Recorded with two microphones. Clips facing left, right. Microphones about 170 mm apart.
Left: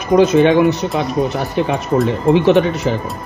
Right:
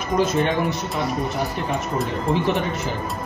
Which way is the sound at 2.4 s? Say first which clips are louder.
Left 12 dB; 80° left.